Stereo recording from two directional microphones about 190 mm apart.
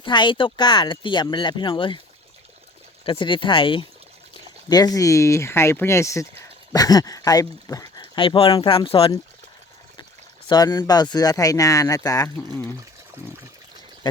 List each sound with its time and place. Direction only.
0.0 s speech: 25° left (ahead or behind)
3.0 s speech: 25° left (ahead or behind)
10.5 s speech: 20° left (ahead or behind)